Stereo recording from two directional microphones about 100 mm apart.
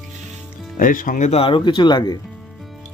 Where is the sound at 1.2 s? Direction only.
90° left.